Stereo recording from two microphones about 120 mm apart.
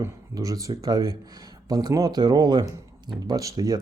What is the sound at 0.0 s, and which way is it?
Speech, 30° right (ahead or behind).